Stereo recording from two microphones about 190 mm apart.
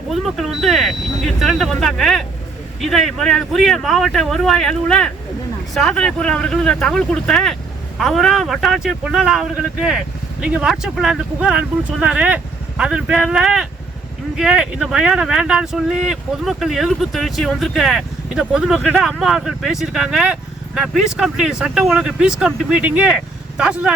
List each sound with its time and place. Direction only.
0.1 s speech: centre (ahead or behind)